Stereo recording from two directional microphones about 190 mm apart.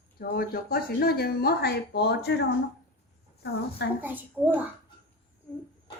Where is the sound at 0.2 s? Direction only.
50° left (ahead or behind).